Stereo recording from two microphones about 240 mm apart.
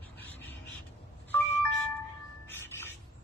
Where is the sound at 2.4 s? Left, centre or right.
Centre.